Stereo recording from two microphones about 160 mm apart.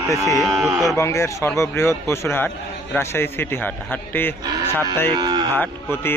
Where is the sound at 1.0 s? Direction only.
20° left (ahead or behind).